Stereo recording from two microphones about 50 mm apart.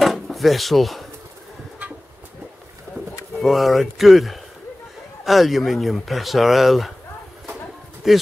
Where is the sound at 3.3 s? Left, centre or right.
Centre.